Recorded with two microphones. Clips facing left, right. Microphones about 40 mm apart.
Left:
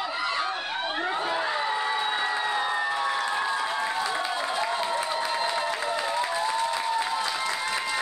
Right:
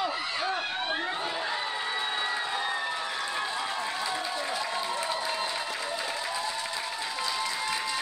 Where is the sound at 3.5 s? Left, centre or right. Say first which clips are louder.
Left 4 dB; left.